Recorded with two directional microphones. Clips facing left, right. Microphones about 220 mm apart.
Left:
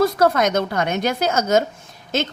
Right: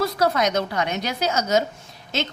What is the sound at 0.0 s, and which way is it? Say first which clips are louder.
Speech: left 4 dB; 50° left (ahead or behind).